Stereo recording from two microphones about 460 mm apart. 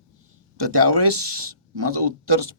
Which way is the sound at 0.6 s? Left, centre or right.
Right.